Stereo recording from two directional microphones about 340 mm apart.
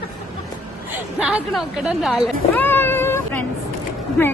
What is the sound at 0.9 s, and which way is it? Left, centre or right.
A man's voice, centre.